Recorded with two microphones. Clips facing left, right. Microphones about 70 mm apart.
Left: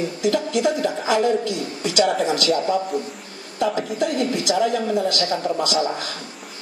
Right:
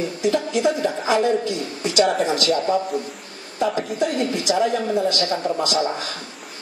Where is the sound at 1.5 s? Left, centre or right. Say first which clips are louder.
Even; right.